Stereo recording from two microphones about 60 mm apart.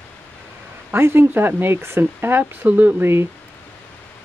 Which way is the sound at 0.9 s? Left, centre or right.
Right.